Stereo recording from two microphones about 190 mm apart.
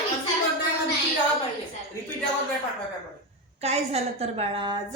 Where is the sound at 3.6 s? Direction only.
35° right (ahead or behind).